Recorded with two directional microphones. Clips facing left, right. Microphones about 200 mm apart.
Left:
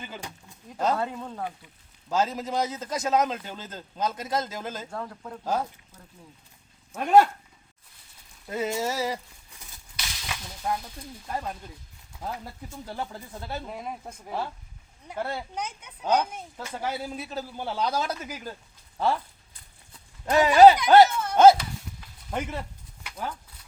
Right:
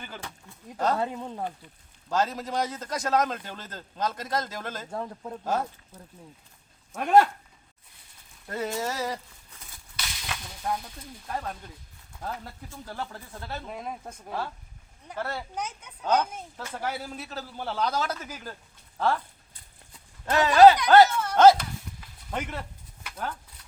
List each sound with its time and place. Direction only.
0.0 s a man's voice: 15° left (ahead or behind)
0.9 s speech: 10° right (ahead or behind)
1.5 s a man's voice: 5° left (ahead or behind)
4.9 s speech: 15° right (ahead or behind)
6.9 s a man's voice: 5° left (ahead or behind)
8.4 s a man's voice: 10° left (ahead or behind)
10.2 s a man's voice: centre (ahead or behind)
12.6 s a man's voice: 20° left (ahead or behind)
13.7 s a man's voice: 5° left (ahead or behind)
15.5 s speech: centre (ahead or behind)
16.0 s a man's voice: 10° left (ahead or behind)
20.2 s speech: 15° left (ahead or behind)